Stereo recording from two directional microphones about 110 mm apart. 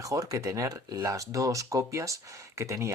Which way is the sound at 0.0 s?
30° right (ahead or behind).